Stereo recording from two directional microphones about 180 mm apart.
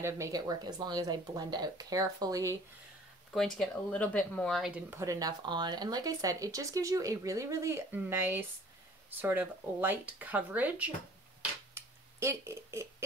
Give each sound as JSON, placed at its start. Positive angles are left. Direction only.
{"t": 0.0, "sound": "speech", "side_deg": -20}
{"t": 3.3, "sound": "speech", "side_deg": 0}
{"t": 5.0, "sound": "speech", "side_deg": -20}
{"t": 11.7, "sound": "a sound", "side_deg": -15}